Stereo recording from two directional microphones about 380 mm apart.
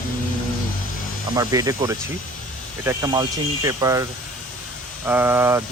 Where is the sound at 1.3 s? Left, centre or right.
Centre.